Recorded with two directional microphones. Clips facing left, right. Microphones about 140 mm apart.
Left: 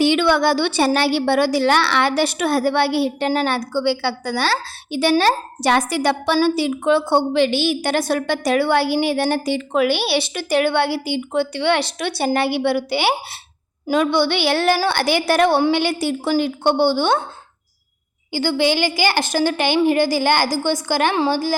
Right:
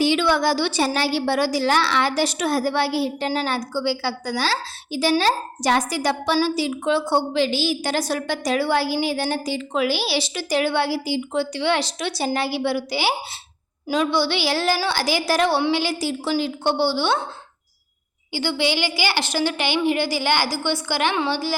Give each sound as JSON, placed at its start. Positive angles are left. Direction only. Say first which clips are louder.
{"t": 0.0, "sound": "speech", "louder": "left 3 dB", "side_deg": 60}
{"t": 18.3, "sound": "a woman's voice", "louder": "left 4 dB", "side_deg": 50}